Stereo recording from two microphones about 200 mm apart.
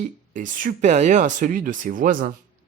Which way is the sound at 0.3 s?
40° right (ahead or behind).